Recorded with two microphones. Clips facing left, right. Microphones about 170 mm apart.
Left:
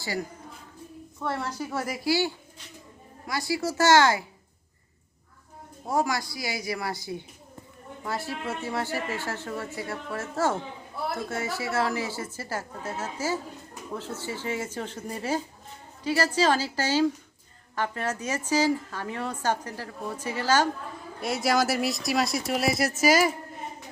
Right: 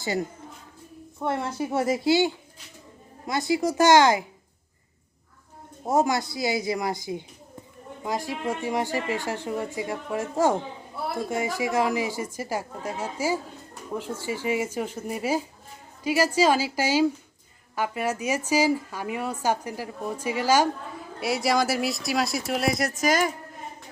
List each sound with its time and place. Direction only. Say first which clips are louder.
0.0 s a woman's voice: right 4 dB; 20° right (ahead or behind)
5.8 s a woman's voice: right 4 dB; 25° right (ahead or behind); by 23.3 s 5° left (ahead or behind)